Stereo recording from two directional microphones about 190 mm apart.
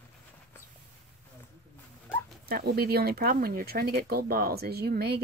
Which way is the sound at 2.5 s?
55° right (ahead or behind).